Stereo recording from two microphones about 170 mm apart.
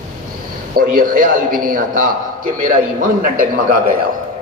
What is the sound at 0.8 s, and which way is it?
A man's voice, 55° right (ahead or behind).